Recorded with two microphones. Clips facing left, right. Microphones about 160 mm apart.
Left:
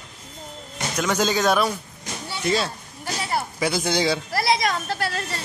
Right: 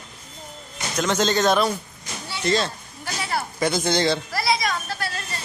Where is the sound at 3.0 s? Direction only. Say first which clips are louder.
Left 1 dB; 15° left (ahead or behind).